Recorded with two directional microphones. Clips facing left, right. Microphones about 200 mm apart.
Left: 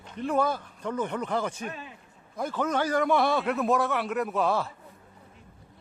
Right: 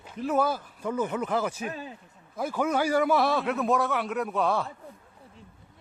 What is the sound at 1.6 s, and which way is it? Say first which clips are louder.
Speech: right 3 dB; 35° right (ahead or behind).